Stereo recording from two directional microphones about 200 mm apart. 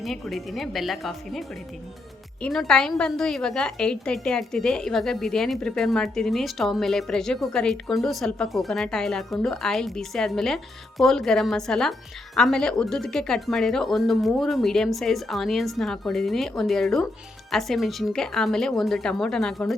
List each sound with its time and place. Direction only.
0.0 s a woman's voice: centre (ahead or behind)